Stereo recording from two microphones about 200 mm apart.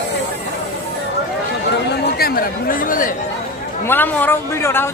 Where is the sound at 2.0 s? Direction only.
50° left (ahead or behind).